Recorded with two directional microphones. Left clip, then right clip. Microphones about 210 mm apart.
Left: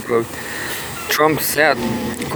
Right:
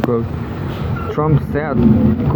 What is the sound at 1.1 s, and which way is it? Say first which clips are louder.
Speech: left 4 dB; 70° left (ahead or behind).